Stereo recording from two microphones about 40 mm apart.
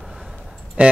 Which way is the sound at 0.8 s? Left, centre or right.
Right.